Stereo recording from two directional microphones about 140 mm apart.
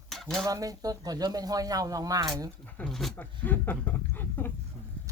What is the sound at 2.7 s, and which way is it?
Speech, 5° left (ahead or behind).